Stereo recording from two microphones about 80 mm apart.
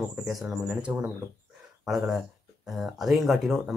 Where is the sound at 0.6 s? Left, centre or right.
Centre.